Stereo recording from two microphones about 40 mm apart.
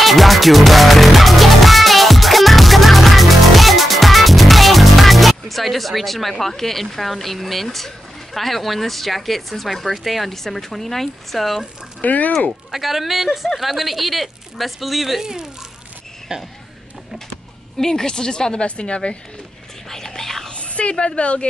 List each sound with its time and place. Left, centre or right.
0.0 s music: centre
12.0 s speech: left
12.3 s speech: centre
12.7 s a woman's voice: centre
15.2 s a child's voice: centre
17.7 s a woman's voice: centre
19.9 s speech: centre
20.5 s a sound: left
20.9 s a woman's voice: left